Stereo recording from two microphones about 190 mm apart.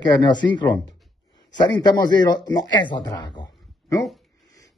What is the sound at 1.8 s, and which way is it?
Speech, 20° left (ahead or behind).